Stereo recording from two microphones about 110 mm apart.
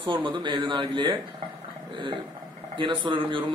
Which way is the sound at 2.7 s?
45° right (ahead or behind).